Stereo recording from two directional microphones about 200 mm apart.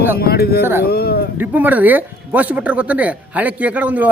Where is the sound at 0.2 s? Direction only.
50° left (ahead or behind).